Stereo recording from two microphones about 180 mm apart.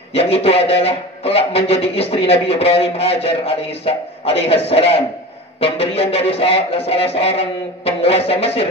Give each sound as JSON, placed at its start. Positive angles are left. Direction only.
{"t": 0.1, "sound": "a man's voice", "side_deg": 35}